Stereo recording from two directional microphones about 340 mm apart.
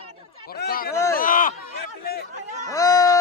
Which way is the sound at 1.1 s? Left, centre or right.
Left.